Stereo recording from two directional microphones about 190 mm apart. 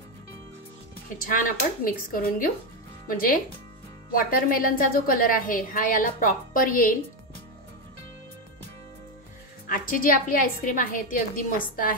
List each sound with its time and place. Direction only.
1.1 s a woman's voice: 50° left (ahead or behind)
9.7 s a woman's voice: 50° left (ahead or behind)